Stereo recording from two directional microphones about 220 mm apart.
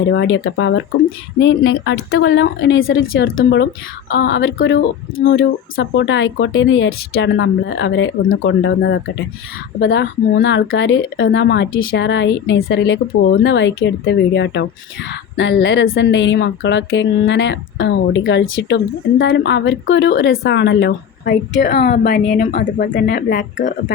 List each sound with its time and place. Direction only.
0.1 s speech: 55° left (ahead or behind); by 23.7 s 35° left (ahead or behind)